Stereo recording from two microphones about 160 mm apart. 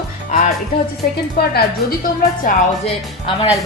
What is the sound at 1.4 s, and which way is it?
Speech, 80° left.